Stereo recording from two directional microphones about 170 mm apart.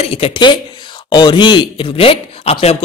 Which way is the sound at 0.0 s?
35° left (ahead or behind).